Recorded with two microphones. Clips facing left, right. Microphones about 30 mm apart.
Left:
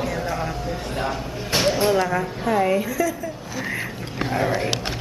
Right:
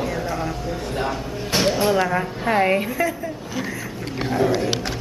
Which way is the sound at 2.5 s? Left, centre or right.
Right.